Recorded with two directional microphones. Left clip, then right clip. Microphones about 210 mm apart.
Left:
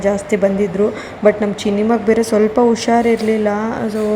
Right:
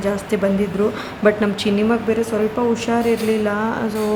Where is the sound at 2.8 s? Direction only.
15° left (ahead or behind).